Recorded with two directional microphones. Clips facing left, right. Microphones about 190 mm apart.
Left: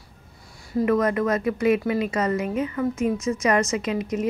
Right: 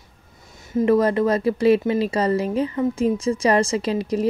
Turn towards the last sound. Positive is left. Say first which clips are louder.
# right 3 dB
turn(degrees=-35)  # may be behind; listen again after turning